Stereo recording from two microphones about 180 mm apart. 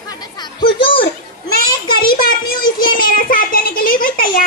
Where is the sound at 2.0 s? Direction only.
55° left (ahead or behind).